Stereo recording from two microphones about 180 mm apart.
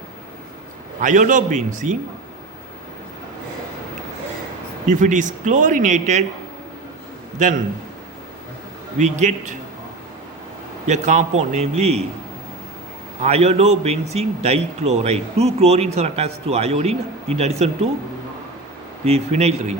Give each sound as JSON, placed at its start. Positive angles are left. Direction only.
{"t": 1.0, "sound": "speech", "side_deg": -45}
{"t": 4.9, "sound": "speech", "side_deg": -45}
{"t": 7.3, "sound": "speech", "side_deg": -45}
{"t": 9.0, "sound": "a man's voice", "side_deg": -40}
{"t": 10.8, "sound": "a man's voice", "side_deg": -40}
{"t": 13.2, "sound": "a man's voice", "side_deg": -35}
{"t": 19.0, "sound": "a man's voice", "side_deg": -35}